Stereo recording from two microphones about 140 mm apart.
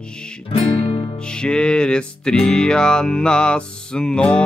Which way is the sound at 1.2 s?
5° left (ahead or behind).